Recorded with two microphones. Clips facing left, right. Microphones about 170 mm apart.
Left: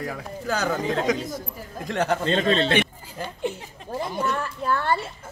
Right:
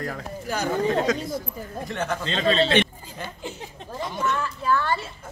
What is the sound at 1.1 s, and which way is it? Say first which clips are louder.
Speech: left 1 dB; 15° left (ahead or behind).